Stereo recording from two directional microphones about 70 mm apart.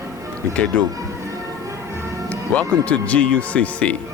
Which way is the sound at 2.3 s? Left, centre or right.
Centre.